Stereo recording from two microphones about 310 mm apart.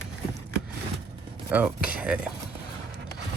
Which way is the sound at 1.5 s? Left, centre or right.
Centre.